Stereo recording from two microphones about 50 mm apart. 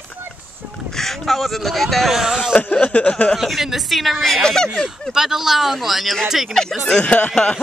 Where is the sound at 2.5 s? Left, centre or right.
Left.